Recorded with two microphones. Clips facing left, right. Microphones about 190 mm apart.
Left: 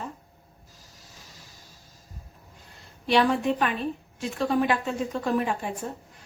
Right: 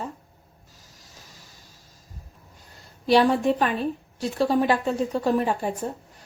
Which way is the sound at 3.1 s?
35° right (ahead or behind).